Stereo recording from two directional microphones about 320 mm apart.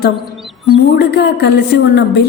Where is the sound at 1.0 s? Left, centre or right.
Left.